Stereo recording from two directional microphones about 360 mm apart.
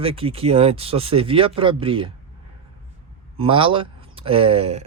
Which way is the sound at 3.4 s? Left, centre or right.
Centre.